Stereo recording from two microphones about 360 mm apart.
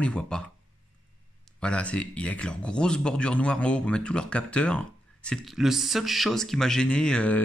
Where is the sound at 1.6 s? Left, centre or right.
Centre.